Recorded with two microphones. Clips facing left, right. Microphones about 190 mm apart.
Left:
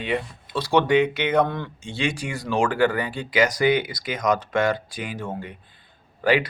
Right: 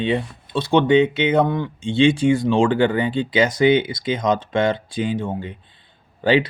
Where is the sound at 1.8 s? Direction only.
25° right (ahead or behind).